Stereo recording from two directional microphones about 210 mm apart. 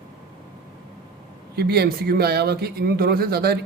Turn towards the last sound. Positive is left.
turn(degrees=-50)  # may be behind; listen again after turning